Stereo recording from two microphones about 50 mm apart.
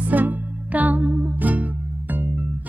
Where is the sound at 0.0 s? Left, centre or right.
Right.